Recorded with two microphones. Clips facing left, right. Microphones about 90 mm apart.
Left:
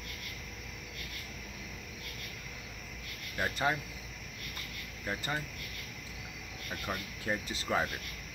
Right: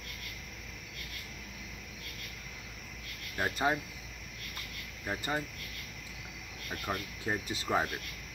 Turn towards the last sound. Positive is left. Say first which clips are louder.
# right 1 dB
turn(degrees=-15)  # may be behind; listen again after turning